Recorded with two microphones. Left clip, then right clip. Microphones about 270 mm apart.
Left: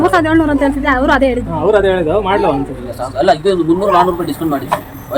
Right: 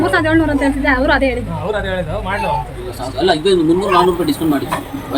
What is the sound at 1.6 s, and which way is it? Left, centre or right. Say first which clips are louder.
Speech: left 10 dB; left.